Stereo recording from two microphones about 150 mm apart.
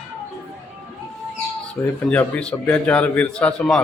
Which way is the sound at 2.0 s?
5° left (ahead or behind).